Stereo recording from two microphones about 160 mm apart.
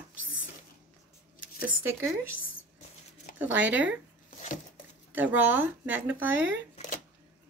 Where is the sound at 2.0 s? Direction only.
15° right (ahead or behind).